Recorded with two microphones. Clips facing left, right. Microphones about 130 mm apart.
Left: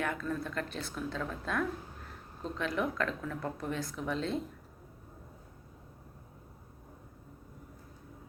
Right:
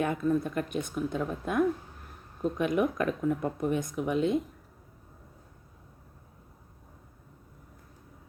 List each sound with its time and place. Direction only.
0.0 s speech: 20° right (ahead or behind)